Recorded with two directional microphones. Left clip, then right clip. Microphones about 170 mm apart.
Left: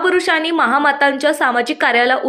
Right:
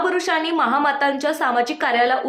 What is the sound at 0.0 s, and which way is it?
A woman's voice, 25° left (ahead or behind).